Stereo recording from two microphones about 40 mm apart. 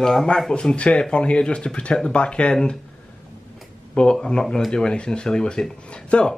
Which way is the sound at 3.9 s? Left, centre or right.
Left.